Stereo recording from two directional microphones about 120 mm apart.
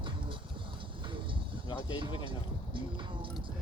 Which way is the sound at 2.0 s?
45° right (ahead or behind).